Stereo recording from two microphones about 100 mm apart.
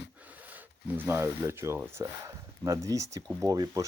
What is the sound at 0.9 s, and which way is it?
Speech, 20° right (ahead or behind).